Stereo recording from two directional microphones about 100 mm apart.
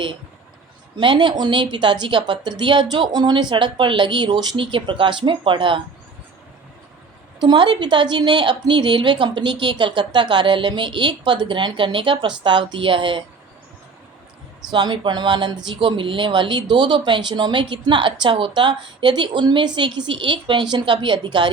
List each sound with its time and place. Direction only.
0.9 s speech: 55° right (ahead or behind)
7.3 s speech: 45° right (ahead or behind)
14.7 s speech: 50° right (ahead or behind)